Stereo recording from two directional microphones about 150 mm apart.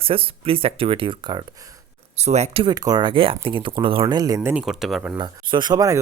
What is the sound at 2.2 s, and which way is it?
Speech, 45° right (ahead or behind).